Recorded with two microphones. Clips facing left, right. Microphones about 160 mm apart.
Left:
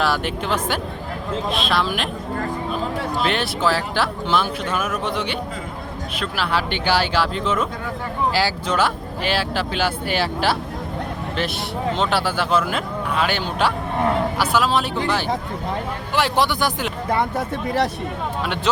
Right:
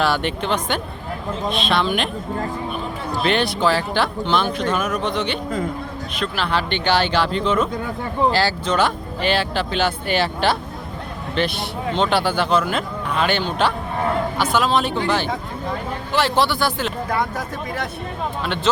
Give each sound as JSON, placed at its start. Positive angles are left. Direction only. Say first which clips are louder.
{"t": 0.0, "sound": "speech", "louder": "right 1 dB", "side_deg": 0}
{"t": 3.2, "sound": "speech", "louder": "right 4 dB", "side_deg": 0}
{"t": 11.9, "sound": "speech", "louder": "right 4 dB", "side_deg": 5}
{"t": 18.4, "sound": "speech", "louder": "right 2 dB", "side_deg": 10}